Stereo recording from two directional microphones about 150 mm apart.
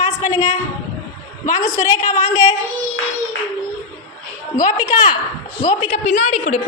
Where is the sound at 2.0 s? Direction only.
20° left (ahead or behind).